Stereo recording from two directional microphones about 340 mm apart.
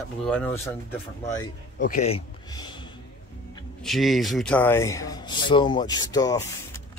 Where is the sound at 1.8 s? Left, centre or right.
Left.